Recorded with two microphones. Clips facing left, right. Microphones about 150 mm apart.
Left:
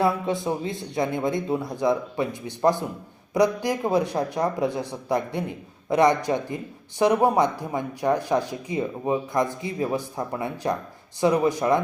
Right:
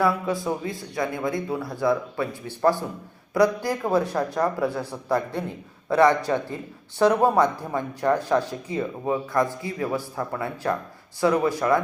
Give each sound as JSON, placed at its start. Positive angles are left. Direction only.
{"t": 0.0, "sound": "speech", "side_deg": 25}